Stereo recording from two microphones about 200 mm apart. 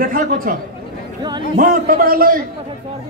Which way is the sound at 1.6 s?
45° right (ahead or behind).